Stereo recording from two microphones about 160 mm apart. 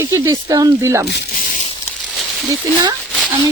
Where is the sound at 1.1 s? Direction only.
80° left; by 1.6 s 60° left (ahead or behind).